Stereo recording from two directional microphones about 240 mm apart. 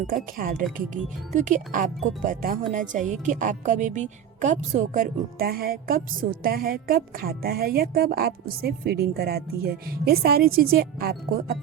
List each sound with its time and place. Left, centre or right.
0.3 s a woman's voice: right